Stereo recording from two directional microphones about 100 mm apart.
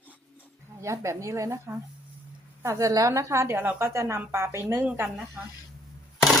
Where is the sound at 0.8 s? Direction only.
30° right (ahead or behind).